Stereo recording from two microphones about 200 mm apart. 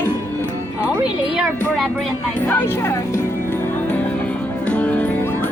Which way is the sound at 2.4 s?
10° left (ahead or behind).